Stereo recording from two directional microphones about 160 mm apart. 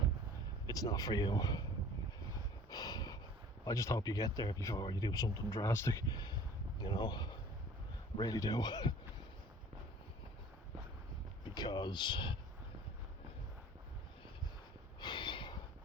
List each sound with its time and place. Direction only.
0.7 s speech: 20° left (ahead or behind)
2.6 s a sound: 25° left (ahead or behind)
3.6 s speech: 20° left (ahead or behind)
11.4 s speech: 25° left (ahead or behind)
15.0 s snort: 30° left (ahead or behind)